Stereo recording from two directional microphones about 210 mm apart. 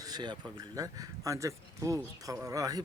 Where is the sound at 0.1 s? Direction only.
20° right (ahead or behind).